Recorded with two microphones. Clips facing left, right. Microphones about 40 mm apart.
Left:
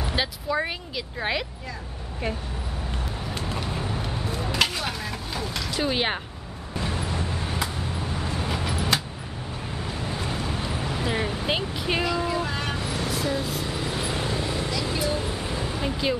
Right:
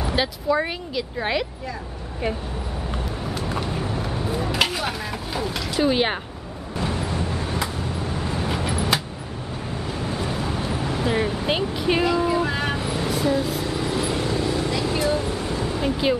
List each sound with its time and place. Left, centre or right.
0.0 s speech: centre
3.5 s chopping: centre
6.8 s vehicle: centre
14.7 s vehicle: centre
15.1 s vehicle: centre
15.6 s a sound: centre